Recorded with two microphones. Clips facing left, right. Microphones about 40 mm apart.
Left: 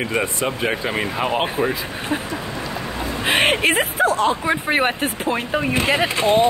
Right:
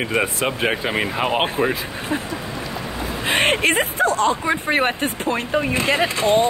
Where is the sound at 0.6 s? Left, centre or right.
Centre.